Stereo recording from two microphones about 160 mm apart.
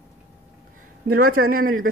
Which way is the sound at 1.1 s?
65° right (ahead or behind).